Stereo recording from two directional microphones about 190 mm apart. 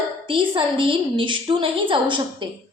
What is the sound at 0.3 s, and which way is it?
A woman's voice, 25° right (ahead or behind).